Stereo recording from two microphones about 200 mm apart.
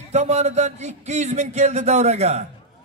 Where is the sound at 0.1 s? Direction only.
35° right (ahead or behind).